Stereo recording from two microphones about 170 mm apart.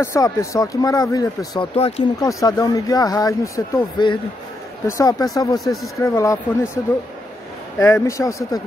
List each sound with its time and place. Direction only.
0.0 s speech: 15° left (ahead or behind)
1.8 s speech: 40° left (ahead or behind)
2.1 s speech: 20° left (ahead or behind)
5.6 s speech: centre (ahead or behind)
5.9 s speech: 20° left (ahead or behind)
7.8 s speech: 15° left (ahead or behind)